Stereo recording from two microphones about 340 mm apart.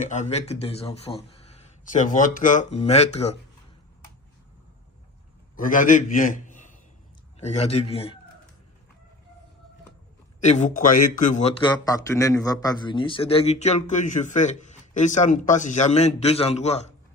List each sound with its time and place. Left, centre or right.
0.0 s speech: left
5.5 s a man's voice: left
10.4 s speech: left